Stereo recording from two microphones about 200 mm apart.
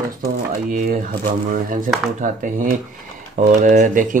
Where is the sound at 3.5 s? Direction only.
40° right (ahead or behind).